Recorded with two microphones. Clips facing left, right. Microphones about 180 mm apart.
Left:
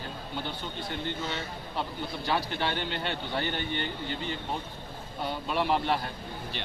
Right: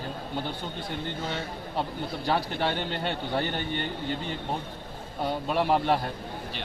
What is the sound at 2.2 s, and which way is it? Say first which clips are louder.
A man's voice: right 3 dB; 40° right (ahead or behind).